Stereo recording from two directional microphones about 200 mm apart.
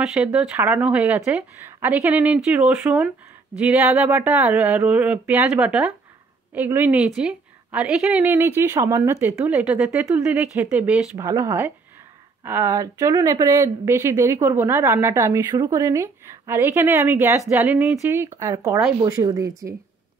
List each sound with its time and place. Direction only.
0.0 s a woman's voice: 5° right (ahead or behind)